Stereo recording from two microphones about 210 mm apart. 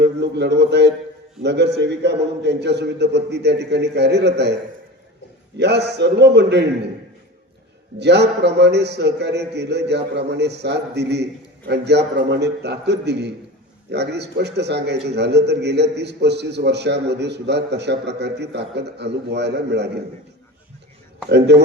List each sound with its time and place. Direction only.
0.0 s a man's voice: 55° right (ahead or behind)
5.5 s a man's voice: 55° right (ahead or behind)
7.9 s a man's voice: 55° right (ahead or behind)
21.2 s a man's voice: 55° right (ahead or behind)